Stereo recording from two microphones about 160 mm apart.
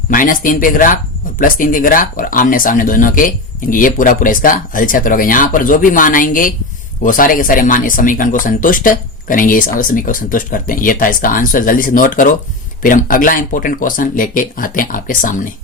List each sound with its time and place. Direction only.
0.1 s speech: 60° left (ahead or behind)